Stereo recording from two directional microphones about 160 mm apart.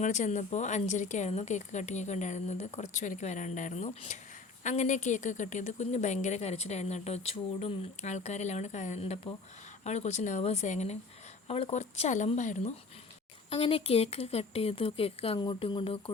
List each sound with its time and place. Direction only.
0.0 s a woman's voice: 50° left (ahead or behind)
13.5 s speech: 35° left (ahead or behind)